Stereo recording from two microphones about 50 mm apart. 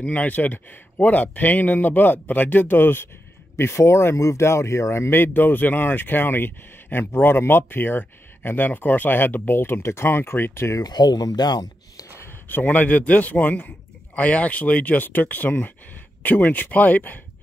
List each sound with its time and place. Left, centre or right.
0.0 s a man's voice: left
3.5 s speech: left
5.1 s speech: left
8.0 s speech: left
12.4 s a man's voice: left